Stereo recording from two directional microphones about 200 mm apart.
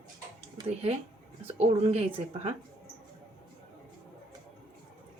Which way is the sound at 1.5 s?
35° right (ahead or behind).